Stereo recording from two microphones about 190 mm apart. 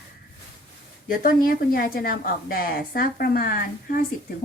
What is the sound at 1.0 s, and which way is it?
Speech, 45° left (ahead or behind).